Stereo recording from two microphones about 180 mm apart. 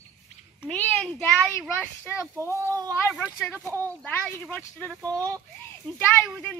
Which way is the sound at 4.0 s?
5° left (ahead or behind).